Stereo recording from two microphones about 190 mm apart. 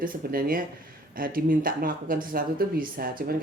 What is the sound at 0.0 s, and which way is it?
Speech, 50° right (ahead or behind).